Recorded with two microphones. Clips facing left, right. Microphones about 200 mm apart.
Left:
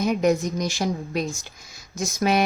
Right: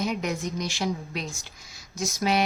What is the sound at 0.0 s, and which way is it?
Speech, 45° left (ahead or behind).